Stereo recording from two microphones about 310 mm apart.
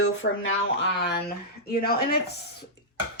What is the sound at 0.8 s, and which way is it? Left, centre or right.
Speech, left.